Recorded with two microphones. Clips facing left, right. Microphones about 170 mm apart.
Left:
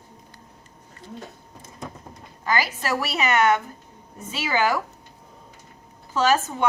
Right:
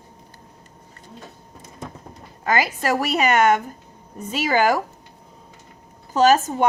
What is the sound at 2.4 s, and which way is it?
A woman's voice, 50° right (ahead or behind).